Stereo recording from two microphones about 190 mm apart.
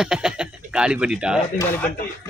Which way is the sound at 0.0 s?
5° right (ahead or behind).